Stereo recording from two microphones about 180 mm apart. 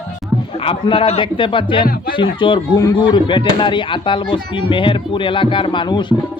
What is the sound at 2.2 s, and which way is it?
Speech, 30° left (ahead or behind).